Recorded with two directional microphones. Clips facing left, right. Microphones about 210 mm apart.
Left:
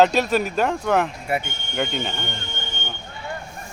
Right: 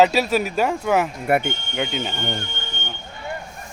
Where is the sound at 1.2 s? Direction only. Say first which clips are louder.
Right 6 dB; 55° right (ahead or behind).